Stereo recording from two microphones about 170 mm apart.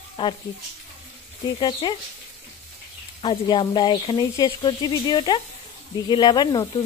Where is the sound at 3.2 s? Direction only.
25° left (ahead or behind).